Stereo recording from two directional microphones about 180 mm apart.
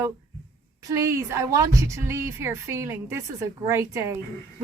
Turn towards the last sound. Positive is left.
turn(degrees=-15)  # may be behind; listen again after turning